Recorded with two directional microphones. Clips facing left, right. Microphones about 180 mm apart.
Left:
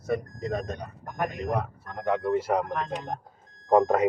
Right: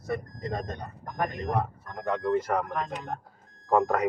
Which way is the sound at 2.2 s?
10° left (ahead or behind).